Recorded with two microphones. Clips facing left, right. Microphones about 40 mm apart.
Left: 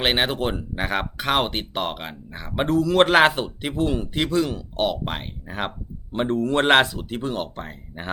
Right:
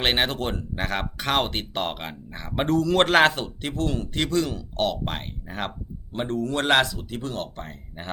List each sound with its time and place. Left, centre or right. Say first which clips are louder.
0.0 s speech: left 2 dB; centre
6.1 s speech: left 4 dB; left